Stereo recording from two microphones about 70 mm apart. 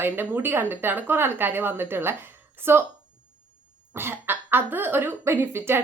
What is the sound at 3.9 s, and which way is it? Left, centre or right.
Speech, right.